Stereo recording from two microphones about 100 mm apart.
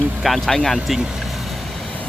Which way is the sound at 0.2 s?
Centre (ahead or behind).